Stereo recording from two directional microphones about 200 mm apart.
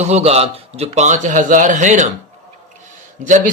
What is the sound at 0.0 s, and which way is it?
Speech, 35° right (ahead or behind).